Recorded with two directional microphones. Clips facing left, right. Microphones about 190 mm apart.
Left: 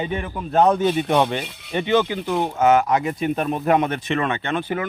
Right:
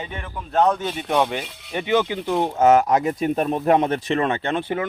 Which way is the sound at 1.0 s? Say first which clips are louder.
Left 2 dB; 5° right (ahead or behind).